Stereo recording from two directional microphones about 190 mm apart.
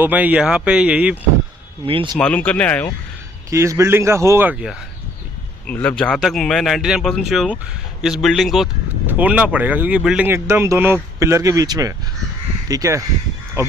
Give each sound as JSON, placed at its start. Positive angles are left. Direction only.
{"t": 0.0, "sound": "speech", "side_deg": -10}
{"t": 2.1, "sound": "speech", "side_deg": 5}
{"t": 3.4, "sound": "speech", "side_deg": -15}
{"t": 5.7, "sound": "speech", "side_deg": 5}